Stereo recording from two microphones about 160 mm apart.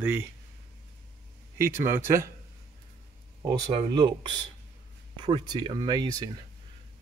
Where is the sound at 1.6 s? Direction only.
15° right (ahead or behind).